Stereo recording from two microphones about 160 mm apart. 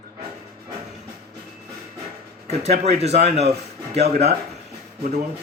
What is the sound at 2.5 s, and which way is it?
Speech, 40° right (ahead or behind).